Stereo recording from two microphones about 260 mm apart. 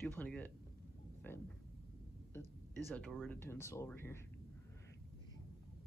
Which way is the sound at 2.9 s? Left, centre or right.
Centre.